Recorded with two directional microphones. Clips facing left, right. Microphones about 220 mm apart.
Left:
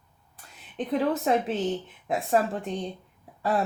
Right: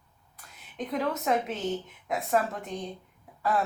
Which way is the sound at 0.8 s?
30° left (ahead or behind).